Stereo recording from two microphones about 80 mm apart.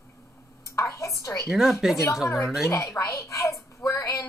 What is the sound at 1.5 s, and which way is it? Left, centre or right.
Speech, centre.